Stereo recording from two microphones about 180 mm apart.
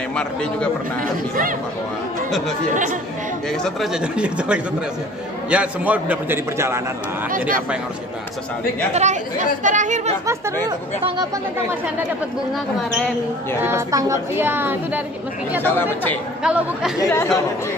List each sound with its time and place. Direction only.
0.1 s speech: 5° left (ahead or behind)
2.7 s speech: 45° right (ahead or behind)
3.6 s a man's voice: centre (ahead or behind)
7.2 s speech: 50° right (ahead or behind)
8.9 s speech: 40° right (ahead or behind)
13.6 s a man's voice: 15° right (ahead or behind)
15.6 s speech: 10° left (ahead or behind)
16.4 s speech: 5° right (ahead or behind)
17.0 s speech: 15° left (ahead or behind)